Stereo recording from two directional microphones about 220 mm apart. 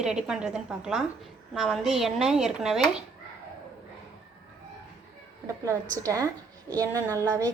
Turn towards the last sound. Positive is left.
turn(degrees=-15)  # may be behind; listen again after turning